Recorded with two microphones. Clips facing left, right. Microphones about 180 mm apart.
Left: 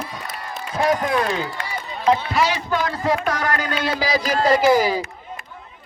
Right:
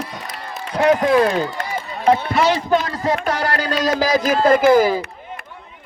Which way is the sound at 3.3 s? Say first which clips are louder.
Right 2 dB; 30° right (ahead or behind).